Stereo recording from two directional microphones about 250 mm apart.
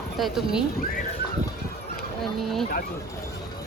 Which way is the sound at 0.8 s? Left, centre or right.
Left.